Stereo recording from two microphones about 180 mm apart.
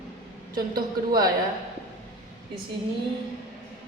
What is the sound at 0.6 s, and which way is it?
Speech, 55° right (ahead or behind).